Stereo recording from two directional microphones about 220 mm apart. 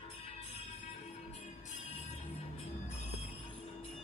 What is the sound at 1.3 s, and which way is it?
Music, 30° left (ahead or behind).